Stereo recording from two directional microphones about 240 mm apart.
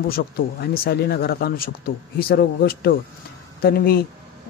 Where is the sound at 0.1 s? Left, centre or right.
Left.